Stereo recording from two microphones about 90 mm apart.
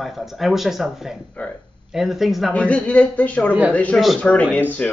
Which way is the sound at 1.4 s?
15° left (ahead or behind).